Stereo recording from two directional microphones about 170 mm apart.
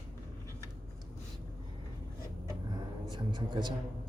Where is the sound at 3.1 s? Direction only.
25° right (ahead or behind).